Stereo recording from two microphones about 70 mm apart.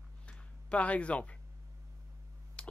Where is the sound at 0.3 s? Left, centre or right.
Centre.